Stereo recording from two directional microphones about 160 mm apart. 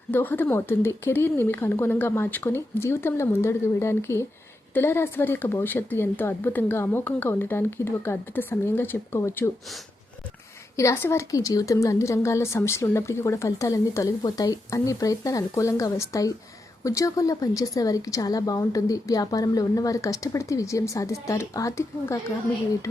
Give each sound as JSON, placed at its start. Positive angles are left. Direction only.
{"t": 0.1, "sound": "speech", "side_deg": 10}
{"t": 10.8, "sound": "a woman's voice", "side_deg": 15}